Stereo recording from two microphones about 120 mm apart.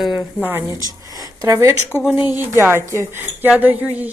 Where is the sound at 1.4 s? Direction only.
25° right (ahead or behind).